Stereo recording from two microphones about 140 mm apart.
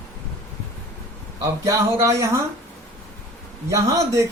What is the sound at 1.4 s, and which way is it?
Speech, 20° right (ahead or behind).